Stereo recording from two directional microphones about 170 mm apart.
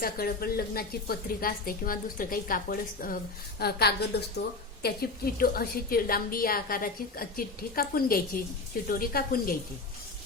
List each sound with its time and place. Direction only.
0.0 s a woman's voice: 60° left (ahead or behind)
3.6 s a woman's voice: 70° left (ahead or behind)